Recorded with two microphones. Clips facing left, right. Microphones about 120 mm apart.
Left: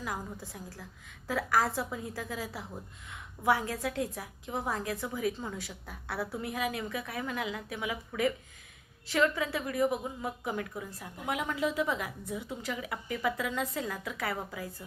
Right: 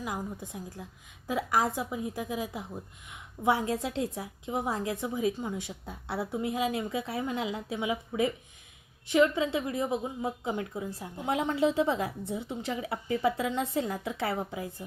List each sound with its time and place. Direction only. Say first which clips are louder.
0.0 s a woman's voice: right 3 dB; 20° right (ahead or behind)